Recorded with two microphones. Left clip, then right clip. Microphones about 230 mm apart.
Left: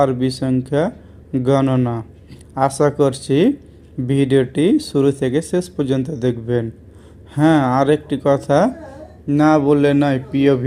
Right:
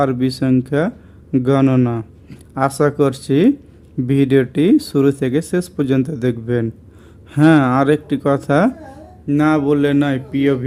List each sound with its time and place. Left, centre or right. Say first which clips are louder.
0.0 s a man's voice: even; centre